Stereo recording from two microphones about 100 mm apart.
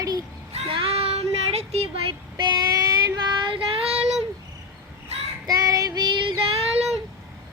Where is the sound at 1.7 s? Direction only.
80° right.